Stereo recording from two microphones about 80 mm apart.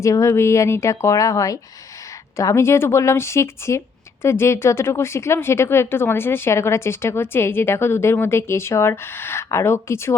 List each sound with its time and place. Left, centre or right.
0.0 s a woman's voice: left